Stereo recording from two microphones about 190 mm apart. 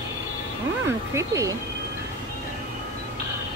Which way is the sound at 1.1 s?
15° right (ahead or behind).